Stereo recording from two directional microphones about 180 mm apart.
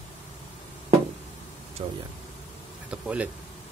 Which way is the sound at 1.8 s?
30° right (ahead or behind).